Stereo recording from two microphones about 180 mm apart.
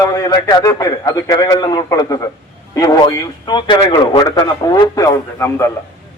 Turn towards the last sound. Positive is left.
turn(degrees=15)  # may be behind; listen again after turning